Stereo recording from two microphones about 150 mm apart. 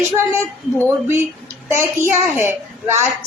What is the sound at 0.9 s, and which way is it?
A woman's voice, 15° right (ahead or behind).